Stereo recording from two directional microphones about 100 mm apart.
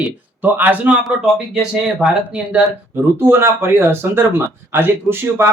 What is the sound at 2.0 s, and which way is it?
Speech, 10° right (ahead or behind).